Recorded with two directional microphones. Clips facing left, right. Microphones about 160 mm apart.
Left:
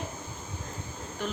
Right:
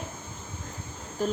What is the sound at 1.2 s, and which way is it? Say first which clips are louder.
Speech: right 7 dB; 40° right (ahead or behind).